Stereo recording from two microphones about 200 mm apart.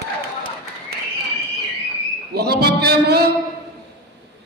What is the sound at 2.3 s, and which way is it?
Speech, 50° right (ahead or behind).